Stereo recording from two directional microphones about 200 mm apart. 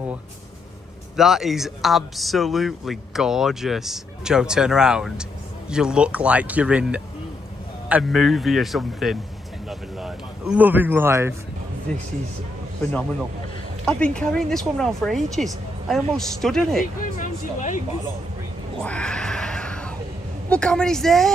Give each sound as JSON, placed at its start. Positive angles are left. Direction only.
{"t": 1.1, "sound": "a man's voice", "side_deg": 0}
{"t": 11.9, "sound": "speech", "side_deg": 5}
{"t": 13.8, "sound": "speech", "side_deg": 5}
{"t": 17.0, "sound": "speech", "side_deg": 40}
{"t": 18.8, "sound": "a sound", "side_deg": 5}
{"t": 20.4, "sound": "speech", "side_deg": 5}